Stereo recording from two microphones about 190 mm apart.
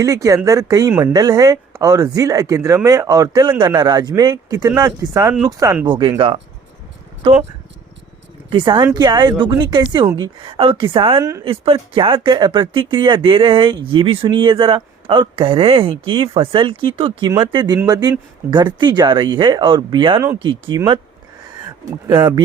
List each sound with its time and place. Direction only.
0.0 s speech: 15° right (ahead or behind)
8.4 s speech: 25° right (ahead or behind)
11.6 s speech: 30° right (ahead or behind)